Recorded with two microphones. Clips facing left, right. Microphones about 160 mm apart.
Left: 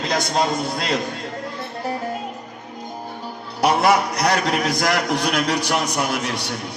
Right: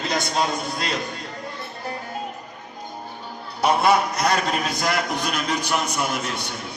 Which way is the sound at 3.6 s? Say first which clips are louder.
Left 2 dB; 75° left (ahead or behind).